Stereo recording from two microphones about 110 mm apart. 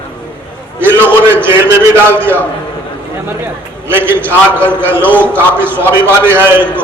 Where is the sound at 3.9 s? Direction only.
20° right (ahead or behind).